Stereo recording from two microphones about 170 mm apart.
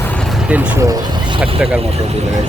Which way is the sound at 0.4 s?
5° right (ahead or behind).